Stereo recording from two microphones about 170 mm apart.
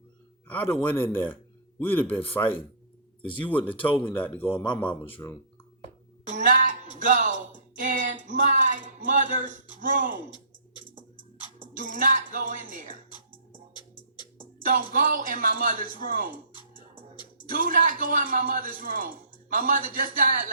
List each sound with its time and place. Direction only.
0.4 s a man's voice: 10° left (ahead or behind)
3.2 s speech: 30° left (ahead or behind)
3.7 s speech: 10° left (ahead or behind)
6.2 s a sound: 50° right (ahead or behind)
7.8 s speech: 50° right (ahead or behind)
10.8 s music: 50° right (ahead or behind)
14.6 s speech: 55° right (ahead or behind)
17.5 s speech: 55° right (ahead or behind)